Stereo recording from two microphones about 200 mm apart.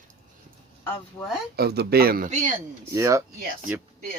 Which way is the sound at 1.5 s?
55° right (ahead or behind).